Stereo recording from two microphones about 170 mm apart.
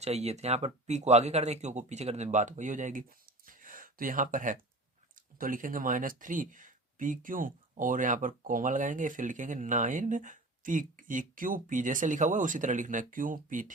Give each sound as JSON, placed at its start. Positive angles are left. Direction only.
{"t": 0.0, "sound": "speech", "side_deg": -40}
{"t": 3.4, "sound": "gasp", "side_deg": -55}
{"t": 5.4, "sound": "speech", "side_deg": -55}